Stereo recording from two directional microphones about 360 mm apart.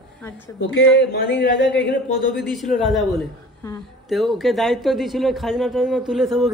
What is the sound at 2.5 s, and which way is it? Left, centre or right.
A woman's voice, centre.